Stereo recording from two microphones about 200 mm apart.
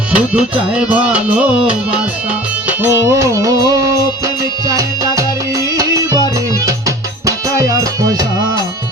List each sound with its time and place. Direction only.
0.1 s music: 5° right (ahead or behind)
2.6 s music: 10° right (ahead or behind)